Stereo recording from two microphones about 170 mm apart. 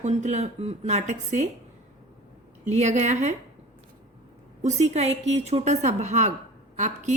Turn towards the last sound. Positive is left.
turn(degrees=-45)  # may be behind; listen again after turning